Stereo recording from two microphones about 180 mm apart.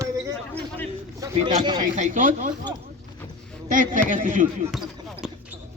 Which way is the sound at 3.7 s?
45° right (ahead or behind).